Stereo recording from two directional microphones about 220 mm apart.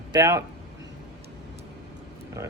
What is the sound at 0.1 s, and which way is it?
Speech, 15° right (ahead or behind).